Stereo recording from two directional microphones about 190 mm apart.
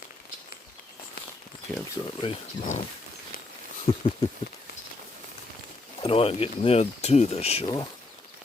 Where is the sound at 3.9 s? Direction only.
30° left (ahead or behind).